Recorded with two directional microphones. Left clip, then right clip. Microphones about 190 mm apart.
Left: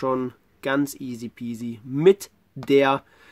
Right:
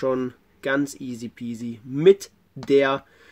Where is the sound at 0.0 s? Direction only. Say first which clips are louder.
Right 1 dB; 15° left (ahead or behind).